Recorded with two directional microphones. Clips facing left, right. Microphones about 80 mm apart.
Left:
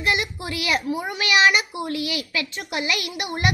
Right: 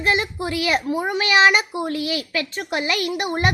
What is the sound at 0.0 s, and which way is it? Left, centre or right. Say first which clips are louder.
A woman's voice: right 3 dB; right.